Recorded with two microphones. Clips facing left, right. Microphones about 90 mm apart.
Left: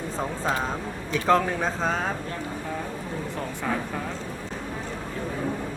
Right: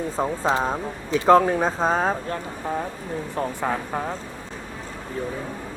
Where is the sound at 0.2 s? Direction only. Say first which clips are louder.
Right 5 dB; 25° right (ahead or behind).